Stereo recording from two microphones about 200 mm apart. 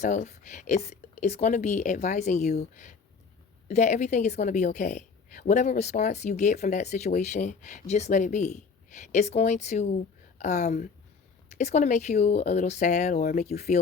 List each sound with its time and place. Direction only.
0.0 s a woman's voice: 35° left (ahead or behind)